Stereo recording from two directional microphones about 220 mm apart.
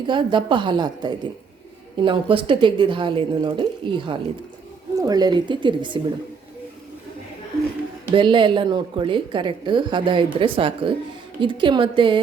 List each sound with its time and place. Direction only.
0.0 s a woman's voice: 20° right (ahead or behind)
8.1 s a woman's voice: 20° right (ahead or behind)